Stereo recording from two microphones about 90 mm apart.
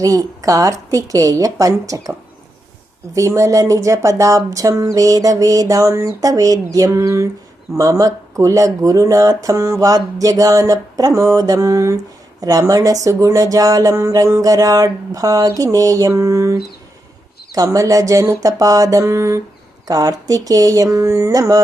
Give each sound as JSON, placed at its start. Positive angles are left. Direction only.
{"t": 0.0, "sound": "a woman's voice", "side_deg": -40}
{"t": 3.2, "sound": "a woman's voice", "side_deg": -35}